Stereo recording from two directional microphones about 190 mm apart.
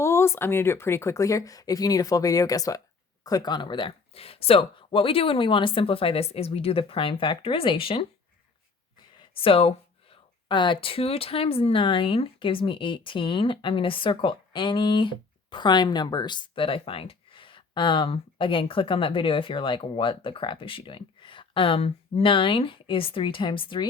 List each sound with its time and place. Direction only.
0.0 s speech: 15° left (ahead or behind)
9.3 s speech: 30° left (ahead or behind)